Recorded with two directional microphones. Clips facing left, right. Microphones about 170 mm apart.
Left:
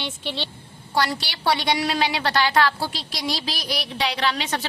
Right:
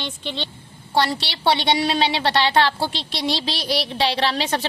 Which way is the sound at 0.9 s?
25° right (ahead or behind).